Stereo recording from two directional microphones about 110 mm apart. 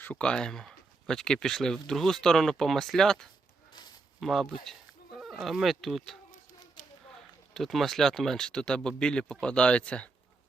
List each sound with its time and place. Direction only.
0.0 s speech: 10° left (ahead or behind)
3.7 s a sound: 40° left (ahead or behind)
4.2 s speech: centre (ahead or behind)
7.5 s speech: centre (ahead or behind)